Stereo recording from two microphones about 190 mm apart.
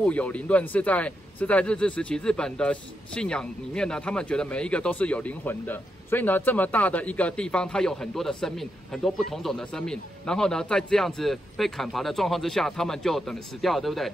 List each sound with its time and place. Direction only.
0.0 s speech: 5° left (ahead or behind)